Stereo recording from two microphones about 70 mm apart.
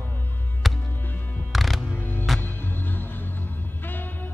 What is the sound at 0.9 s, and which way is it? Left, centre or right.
Music, left.